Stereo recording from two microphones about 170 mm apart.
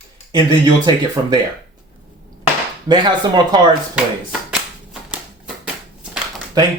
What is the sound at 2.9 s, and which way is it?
Speech, 25° right (ahead or behind).